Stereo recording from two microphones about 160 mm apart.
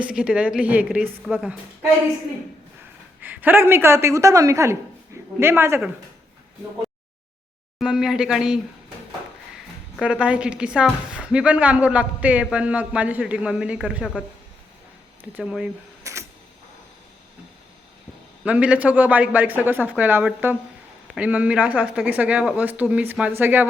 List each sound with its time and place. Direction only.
0.0 s a woman's voice: 5° right (ahead or behind)
3.2 s a woman's voice: 10° right (ahead or behind)
7.8 s speech: 5° right (ahead or behind)
10.0 s a woman's voice: 5° right (ahead or behind)
15.2 s a woman's voice: 5° right (ahead or behind)
16.1 s camera: 20° right (ahead or behind)
18.4 s a woman's voice: 5° right (ahead or behind)